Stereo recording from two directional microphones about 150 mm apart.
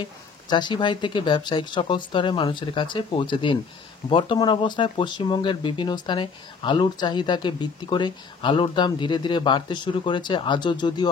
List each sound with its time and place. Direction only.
0.0 s speech: 30° left (ahead or behind)